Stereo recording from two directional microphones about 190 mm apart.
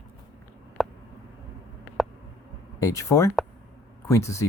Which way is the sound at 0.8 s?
Centre (ahead or behind).